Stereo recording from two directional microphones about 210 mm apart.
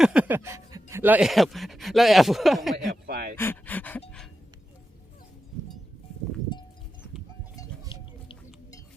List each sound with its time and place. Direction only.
0.0 s speech: 5° right (ahead or behind)
2.8 s a sound: 45° right (ahead or behind)
3.3 s speech: 10° left (ahead or behind)
6.5 s livestock: 20° left (ahead or behind)
7.5 s music: 15° left (ahead or behind)